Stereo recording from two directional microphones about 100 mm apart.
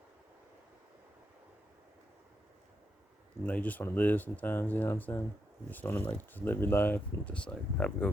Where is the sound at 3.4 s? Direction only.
15° left (ahead or behind).